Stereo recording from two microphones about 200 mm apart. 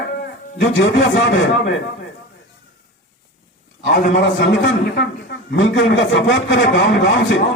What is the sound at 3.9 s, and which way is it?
A man's voice, 65° left (ahead or behind).